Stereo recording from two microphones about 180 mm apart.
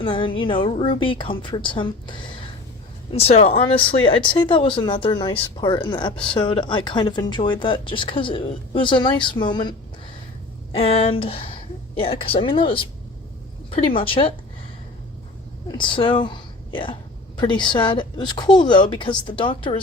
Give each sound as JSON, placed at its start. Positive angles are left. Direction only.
{"t": 0.0, "sound": "speech", "side_deg": 30}
{"t": 13.8, "sound": "a woman's voice", "side_deg": 30}
{"t": 15.7, "sound": "a woman's voice", "side_deg": 25}